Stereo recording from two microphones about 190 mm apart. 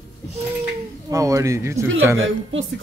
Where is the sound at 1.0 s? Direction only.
15° right (ahead or behind).